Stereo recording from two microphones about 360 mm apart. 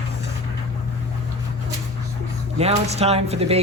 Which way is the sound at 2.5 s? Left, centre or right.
Centre.